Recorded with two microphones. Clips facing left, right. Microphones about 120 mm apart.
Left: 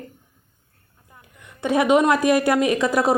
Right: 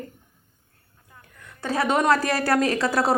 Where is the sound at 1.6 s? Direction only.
20° left (ahead or behind).